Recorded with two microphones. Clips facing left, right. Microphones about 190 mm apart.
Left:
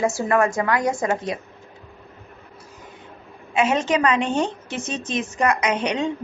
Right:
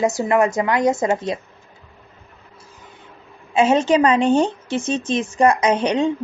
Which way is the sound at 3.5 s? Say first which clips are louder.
Right 5 dB; 30° right (ahead or behind).